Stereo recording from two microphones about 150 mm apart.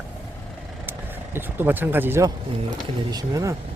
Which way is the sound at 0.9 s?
15° right (ahead or behind).